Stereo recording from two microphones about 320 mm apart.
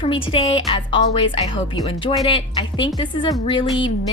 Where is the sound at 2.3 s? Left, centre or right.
Centre.